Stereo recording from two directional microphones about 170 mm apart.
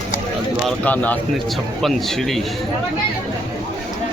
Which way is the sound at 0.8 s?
10° left (ahead or behind).